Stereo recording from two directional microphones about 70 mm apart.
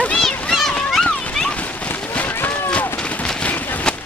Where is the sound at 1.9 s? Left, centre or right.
Left.